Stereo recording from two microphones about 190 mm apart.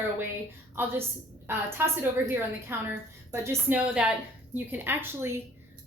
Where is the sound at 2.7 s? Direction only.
10° right (ahead or behind).